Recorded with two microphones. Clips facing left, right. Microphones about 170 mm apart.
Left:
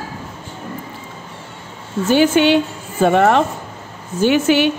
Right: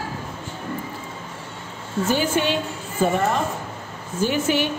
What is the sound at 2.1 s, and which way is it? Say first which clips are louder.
A woman's voice: left 10 dB; 75° left (ahead or behind).